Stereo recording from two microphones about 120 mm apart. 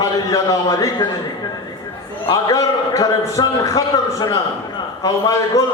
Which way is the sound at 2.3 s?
30° left (ahead or behind).